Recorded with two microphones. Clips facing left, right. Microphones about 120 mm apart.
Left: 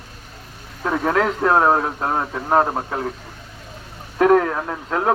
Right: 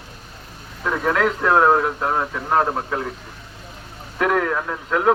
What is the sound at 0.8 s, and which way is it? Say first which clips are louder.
Speech: left 1 dB; 30° left (ahead or behind).